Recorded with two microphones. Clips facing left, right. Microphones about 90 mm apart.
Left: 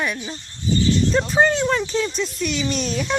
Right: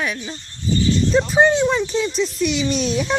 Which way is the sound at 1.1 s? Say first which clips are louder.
Right 3 dB; 5° right (ahead or behind).